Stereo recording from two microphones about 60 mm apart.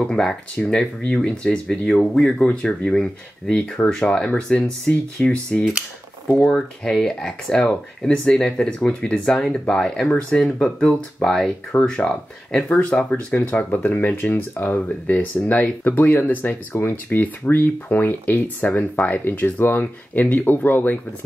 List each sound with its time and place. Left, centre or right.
0.0 s speech: centre
10.1 s speech: left
11.1 s speech: centre
12.7 s speech: left
13.4 s speech: left